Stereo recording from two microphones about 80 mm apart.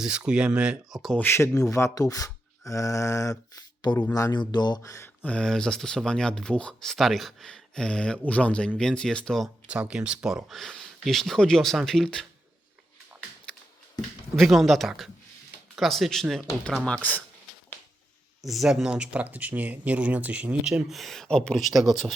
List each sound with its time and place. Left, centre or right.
0.0 s speech: centre
1.2 s speech: left
3.8 s speech: left
4.8 s speech: left
5.0 s speech: centre
9.6 s speech: centre
14.3 s speech: centre
16.8 s speech: centre
18.4 s speech: centre
20.9 s speech: centre